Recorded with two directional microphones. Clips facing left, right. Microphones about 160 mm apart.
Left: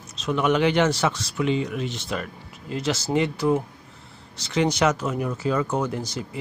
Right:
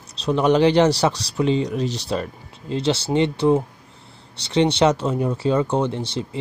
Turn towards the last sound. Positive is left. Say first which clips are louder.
# right 3 dB
turn(degrees=-30)  # may be behind; listen again after turning